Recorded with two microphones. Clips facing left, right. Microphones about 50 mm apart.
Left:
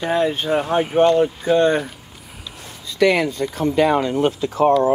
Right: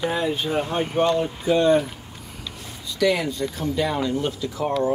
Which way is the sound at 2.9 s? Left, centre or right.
Left.